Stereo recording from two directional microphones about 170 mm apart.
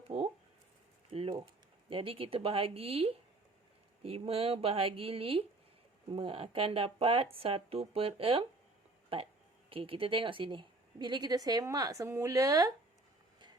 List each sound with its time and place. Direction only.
1.1 s speech: 35° right (ahead or behind)